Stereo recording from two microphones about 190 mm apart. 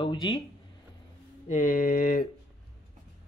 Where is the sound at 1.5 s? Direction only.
40° left (ahead or behind).